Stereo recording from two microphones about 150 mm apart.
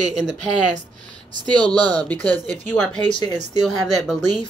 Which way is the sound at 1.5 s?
30° right (ahead or behind).